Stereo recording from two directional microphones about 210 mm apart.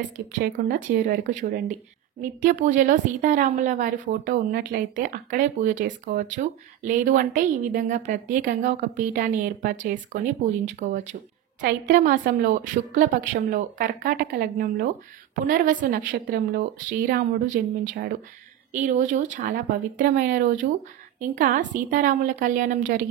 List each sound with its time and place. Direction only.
0.4 s a woman's voice: 45° right (ahead or behind)